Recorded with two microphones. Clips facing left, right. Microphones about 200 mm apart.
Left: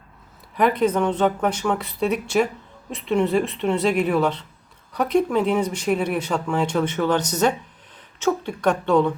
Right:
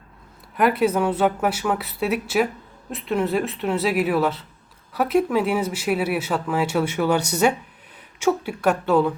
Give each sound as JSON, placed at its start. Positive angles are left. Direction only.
{"t": 0.5, "sound": "a woman's voice", "side_deg": -5}